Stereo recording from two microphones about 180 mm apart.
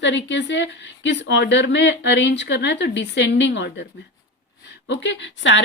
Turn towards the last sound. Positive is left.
turn(degrees=90)